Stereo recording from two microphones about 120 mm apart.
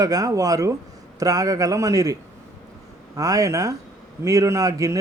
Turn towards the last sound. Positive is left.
turn(degrees=-30)  # may be behind; listen again after turning